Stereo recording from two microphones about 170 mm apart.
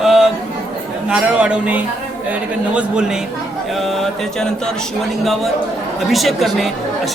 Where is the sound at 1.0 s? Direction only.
5° right (ahead or behind).